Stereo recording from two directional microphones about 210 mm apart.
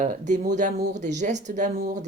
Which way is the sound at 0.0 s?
35° right (ahead or behind).